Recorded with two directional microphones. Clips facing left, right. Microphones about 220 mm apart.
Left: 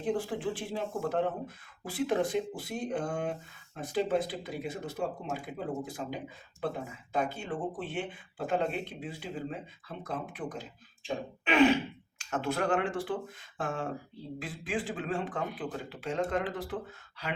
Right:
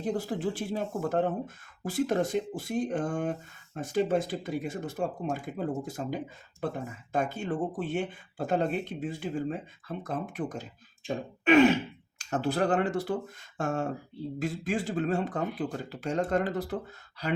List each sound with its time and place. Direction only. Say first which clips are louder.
0.0 s speech: right 1 dB; 40° right (ahead or behind)
11.0 s a sound: right 6 dB; 45° right (ahead or behind)
12.2 s speech: right 3 dB; 35° right (ahead or behind)